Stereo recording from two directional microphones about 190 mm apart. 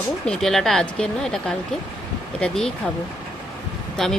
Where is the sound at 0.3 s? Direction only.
Centre (ahead or behind).